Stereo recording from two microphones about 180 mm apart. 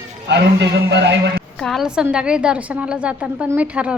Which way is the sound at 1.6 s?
Centre (ahead or behind).